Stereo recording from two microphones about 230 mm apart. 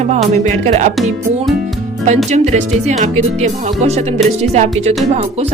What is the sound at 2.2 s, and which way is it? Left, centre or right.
Speech, right.